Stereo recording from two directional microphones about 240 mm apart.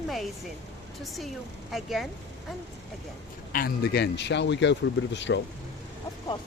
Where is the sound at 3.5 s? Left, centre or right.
Left.